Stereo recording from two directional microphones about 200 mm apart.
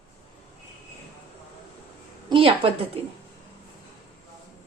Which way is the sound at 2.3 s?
25° right (ahead or behind).